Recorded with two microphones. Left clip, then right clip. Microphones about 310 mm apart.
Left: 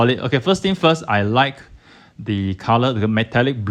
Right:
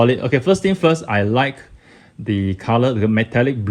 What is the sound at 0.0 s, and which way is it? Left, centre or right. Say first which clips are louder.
Speech: right 2 dB; centre.